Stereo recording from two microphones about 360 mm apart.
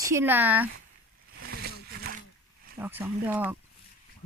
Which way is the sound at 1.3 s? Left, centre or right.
Right.